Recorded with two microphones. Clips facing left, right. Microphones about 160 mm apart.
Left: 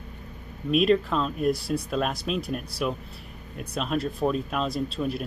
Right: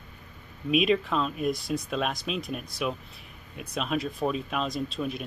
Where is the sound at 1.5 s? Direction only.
30° left (ahead or behind).